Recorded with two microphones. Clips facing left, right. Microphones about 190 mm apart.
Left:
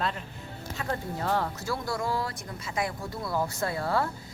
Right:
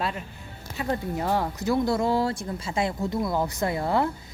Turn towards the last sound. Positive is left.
turn(degrees=-20)  # may be behind; listen again after turning